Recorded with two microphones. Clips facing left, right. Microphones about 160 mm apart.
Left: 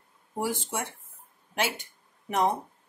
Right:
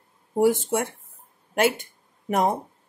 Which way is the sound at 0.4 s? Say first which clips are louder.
Right 10 dB; 50° right (ahead or behind).